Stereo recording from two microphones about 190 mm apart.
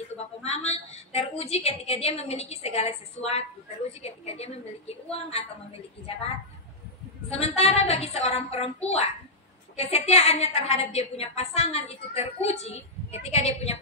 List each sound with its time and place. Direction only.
0.4 s a woman's voice: 35° left (ahead or behind)
4.0 s a woman's voice: 30° left (ahead or behind)
7.2 s a woman's voice: 35° left (ahead or behind)